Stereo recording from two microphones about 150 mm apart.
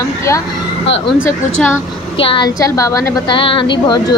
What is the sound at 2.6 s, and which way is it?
Speech, 20° left (ahead or behind).